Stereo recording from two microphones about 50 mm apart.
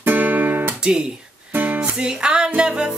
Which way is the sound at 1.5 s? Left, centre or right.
Right.